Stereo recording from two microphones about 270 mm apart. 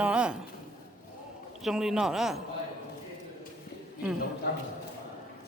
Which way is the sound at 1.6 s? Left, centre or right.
Centre.